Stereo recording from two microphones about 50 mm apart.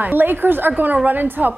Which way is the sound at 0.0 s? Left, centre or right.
Right.